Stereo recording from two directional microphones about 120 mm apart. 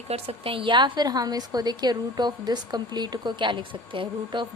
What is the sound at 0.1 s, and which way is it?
A woman's voice, 55° right (ahead or behind).